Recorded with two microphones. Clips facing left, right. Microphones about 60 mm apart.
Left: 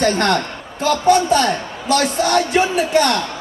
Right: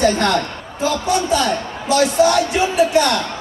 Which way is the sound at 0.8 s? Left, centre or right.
Left.